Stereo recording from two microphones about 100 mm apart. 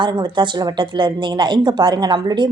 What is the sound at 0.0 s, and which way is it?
Speech, 50° right (ahead or behind).